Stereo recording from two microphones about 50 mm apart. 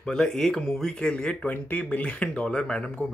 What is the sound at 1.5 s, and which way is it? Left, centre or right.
Speech, left.